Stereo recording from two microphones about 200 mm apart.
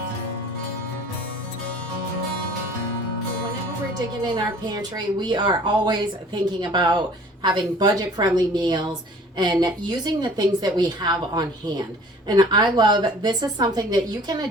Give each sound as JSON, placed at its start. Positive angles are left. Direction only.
{"t": 4.7, "sound": "speech", "side_deg": -20}